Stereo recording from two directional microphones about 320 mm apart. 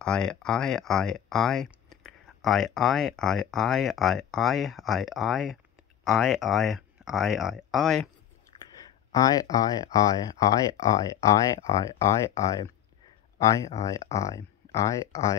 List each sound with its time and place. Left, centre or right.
0.0 s speech: centre
8.7 s speech: centre